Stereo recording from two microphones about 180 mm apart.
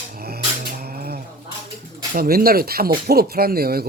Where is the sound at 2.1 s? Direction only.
55° right (ahead or behind).